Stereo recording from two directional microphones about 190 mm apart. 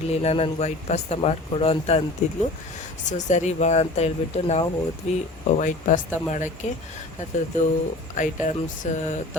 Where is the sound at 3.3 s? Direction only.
40° left (ahead or behind).